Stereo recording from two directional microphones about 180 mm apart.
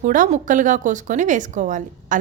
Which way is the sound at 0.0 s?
45° right (ahead or behind).